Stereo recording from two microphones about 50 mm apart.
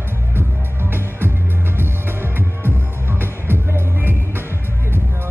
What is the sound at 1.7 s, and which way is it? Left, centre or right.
Music, right.